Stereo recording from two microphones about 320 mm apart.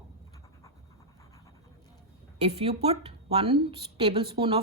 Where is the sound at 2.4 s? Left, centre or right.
Centre.